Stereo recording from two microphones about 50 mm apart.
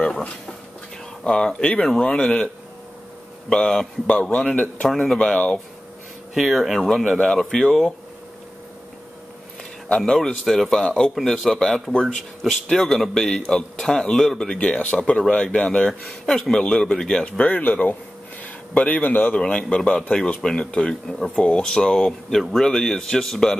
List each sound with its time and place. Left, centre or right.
1.2 s speech: left
4.8 s speech: centre
5.2 s speech: left
6.3 s speech: centre
9.8 s speech: centre
10.8 s speech: centre
14.6 s speech: left
16.3 s speech: centre
17.2 s speech: left
19.3 s speech: left